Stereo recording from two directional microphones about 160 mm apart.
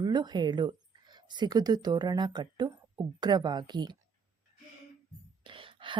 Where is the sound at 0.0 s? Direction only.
25° right (ahead or behind).